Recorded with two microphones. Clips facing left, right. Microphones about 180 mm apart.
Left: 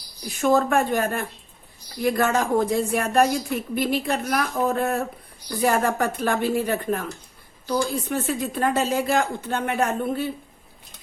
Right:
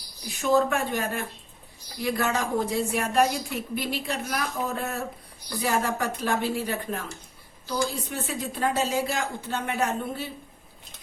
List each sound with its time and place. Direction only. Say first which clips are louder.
0.4 s a woman's voice: left 3 dB; 50° left (ahead or behind)